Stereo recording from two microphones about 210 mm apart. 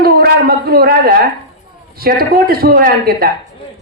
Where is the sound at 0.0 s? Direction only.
45° right (ahead or behind).